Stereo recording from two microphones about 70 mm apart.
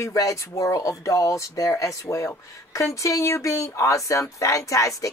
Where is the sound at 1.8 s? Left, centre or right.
Left.